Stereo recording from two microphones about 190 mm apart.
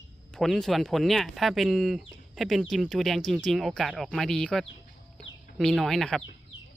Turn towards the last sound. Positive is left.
turn(degrees=0)  # may be behind; listen again after turning